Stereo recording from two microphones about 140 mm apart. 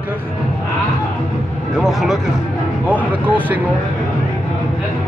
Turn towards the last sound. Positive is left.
turn(degrees=-10)  # may be behind; listen again after turning